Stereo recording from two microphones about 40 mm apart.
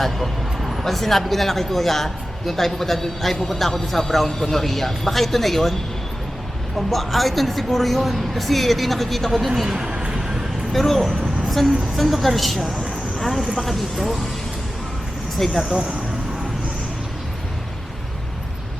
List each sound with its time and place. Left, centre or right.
0.6 s vehicle: centre
0.9 s a woman's voice: centre
6.7 s a woman's voice: centre
9.6 s speech: centre
9.9 s a sound: right
10.7 s a woman's voice: centre
13.1 s vehicle: centre
13.6 s a woman's voice: centre
15.4 s speech: centre
15.7 s speech: right